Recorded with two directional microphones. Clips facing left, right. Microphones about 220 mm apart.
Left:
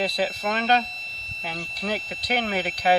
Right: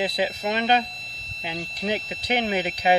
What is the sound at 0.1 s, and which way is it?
Speech, 15° right (ahead or behind).